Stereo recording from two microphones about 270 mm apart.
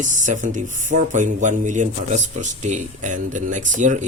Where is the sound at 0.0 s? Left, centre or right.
Right.